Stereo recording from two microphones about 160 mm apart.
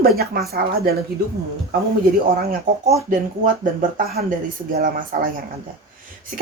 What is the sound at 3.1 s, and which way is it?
Speech, 55° right (ahead or behind).